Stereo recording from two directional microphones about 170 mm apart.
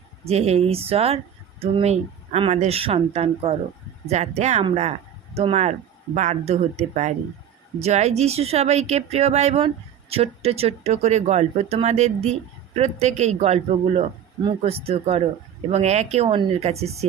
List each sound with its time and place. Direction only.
0.3 s speech: 40° right (ahead or behind)